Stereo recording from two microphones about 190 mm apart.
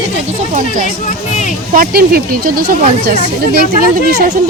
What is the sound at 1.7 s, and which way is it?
Speech, 50° right (ahead or behind).